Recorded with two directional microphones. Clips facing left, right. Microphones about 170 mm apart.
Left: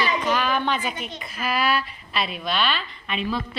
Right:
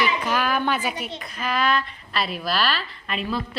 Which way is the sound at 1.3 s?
10° left (ahead or behind).